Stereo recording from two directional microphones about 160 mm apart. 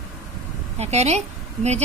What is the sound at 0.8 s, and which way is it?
Speech, 45° right (ahead or behind).